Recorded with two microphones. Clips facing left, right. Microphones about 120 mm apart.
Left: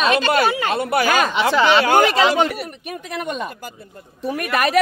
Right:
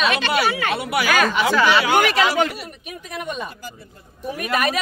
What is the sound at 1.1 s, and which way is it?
Speech, 20° left (ahead or behind).